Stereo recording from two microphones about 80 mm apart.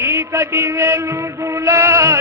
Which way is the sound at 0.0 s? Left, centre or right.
Right.